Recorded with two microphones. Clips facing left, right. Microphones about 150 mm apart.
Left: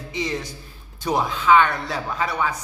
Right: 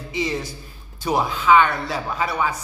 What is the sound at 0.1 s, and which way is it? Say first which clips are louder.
A man's voice: right 2 dB; 5° right (ahead or behind).